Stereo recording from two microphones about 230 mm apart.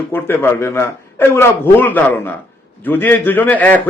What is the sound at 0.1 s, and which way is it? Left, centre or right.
A man's voice, centre.